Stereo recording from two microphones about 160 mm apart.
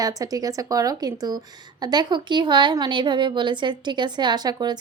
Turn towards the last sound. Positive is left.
turn(degrees=-25)  # may be behind; listen again after turning